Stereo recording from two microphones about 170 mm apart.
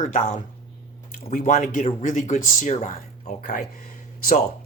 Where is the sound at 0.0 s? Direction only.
50° left (ahead or behind).